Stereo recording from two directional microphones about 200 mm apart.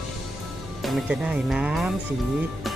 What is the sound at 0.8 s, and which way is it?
Speech, centre (ahead or behind).